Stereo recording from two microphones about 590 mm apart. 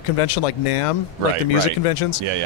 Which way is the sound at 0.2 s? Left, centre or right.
Left.